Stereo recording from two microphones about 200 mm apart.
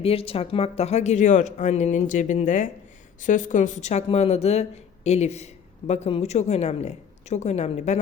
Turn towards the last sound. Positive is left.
turn(degrees=35)  # may be behind; listen again after turning